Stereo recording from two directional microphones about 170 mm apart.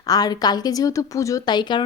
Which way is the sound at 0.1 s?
20° left (ahead or behind).